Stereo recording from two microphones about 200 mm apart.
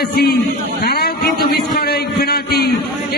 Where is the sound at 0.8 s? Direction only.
50° left (ahead or behind).